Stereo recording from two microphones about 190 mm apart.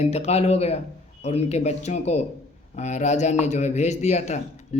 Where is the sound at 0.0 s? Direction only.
35° left (ahead or behind).